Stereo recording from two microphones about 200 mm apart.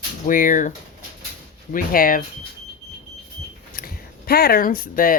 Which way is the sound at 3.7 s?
45° left (ahead or behind).